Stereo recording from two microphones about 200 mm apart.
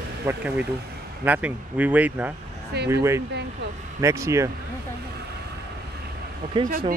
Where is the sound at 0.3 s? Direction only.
15° right (ahead or behind).